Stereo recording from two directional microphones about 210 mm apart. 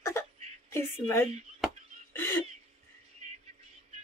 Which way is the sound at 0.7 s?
10° left (ahead or behind).